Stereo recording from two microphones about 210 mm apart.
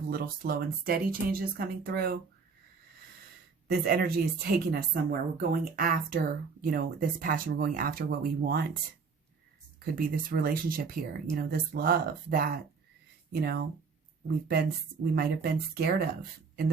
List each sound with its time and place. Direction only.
0.1 s speech: 45° right (ahead or behind)
3.7 s speech: 45° right (ahead or behind)
9.8 s speech: 45° right (ahead or behind)